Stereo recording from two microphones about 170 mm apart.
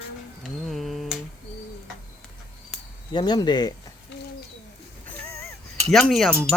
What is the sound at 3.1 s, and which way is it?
Speech, 25° left (ahead or behind).